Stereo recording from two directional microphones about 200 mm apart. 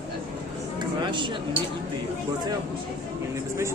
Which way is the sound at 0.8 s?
25° right (ahead or behind).